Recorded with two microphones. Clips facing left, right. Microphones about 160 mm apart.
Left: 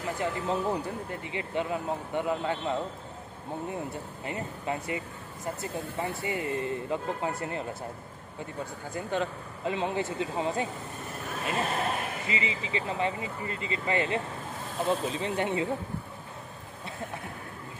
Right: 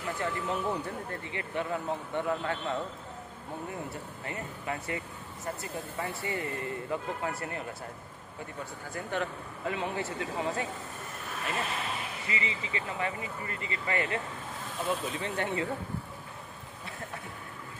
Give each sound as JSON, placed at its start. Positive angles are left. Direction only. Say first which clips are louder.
{"t": 0.2, "sound": "speech", "louder": "left 3 dB", "side_deg": 20}
{"t": 8.9, "sound": "speech", "louder": "left 3 dB", "side_deg": 20}
{"t": 11.7, "sound": "a sound", "louder": "left 6 dB", "side_deg": 50}
{"t": 12.3, "sound": "speech", "louder": "left 1 dB", "side_deg": 20}